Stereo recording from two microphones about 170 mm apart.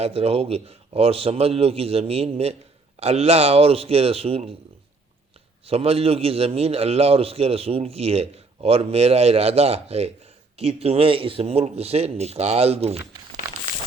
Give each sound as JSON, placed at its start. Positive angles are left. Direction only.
{"t": 0.0, "sound": "a man's voice", "side_deg": -35}
{"t": 5.6, "sound": "a man's voice", "side_deg": -35}